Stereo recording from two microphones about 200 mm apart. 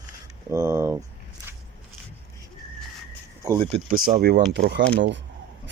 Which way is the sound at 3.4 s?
25° right (ahead or behind).